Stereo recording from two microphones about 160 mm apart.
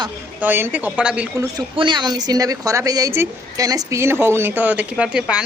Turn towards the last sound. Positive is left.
turn(degrees=-5)  # may be behind; listen again after turning